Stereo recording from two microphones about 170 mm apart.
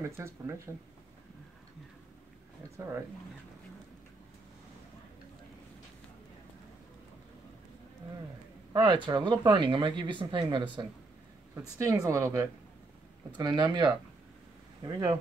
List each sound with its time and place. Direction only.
0.0 s speech: 15° right (ahead or behind)
8.7 s speech: 30° right (ahead or behind)
11.5 s speech: 15° right (ahead or behind)